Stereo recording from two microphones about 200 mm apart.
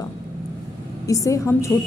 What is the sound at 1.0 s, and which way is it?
Speech, 15° left (ahead or behind).